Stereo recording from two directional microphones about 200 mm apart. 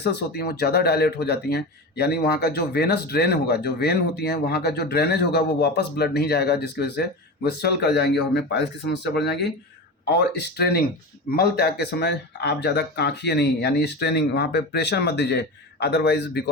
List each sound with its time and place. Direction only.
0.0 s speech: 55° left (ahead or behind)